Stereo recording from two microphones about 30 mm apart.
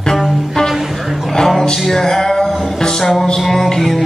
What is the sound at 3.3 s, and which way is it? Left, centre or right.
Music, centre.